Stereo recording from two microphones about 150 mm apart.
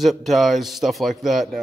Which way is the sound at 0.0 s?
Centre (ahead or behind).